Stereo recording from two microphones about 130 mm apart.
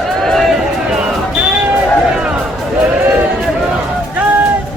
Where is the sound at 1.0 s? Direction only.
5° right (ahead or behind).